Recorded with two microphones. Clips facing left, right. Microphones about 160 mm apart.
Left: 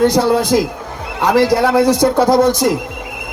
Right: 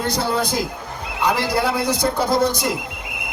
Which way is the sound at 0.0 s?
85° left.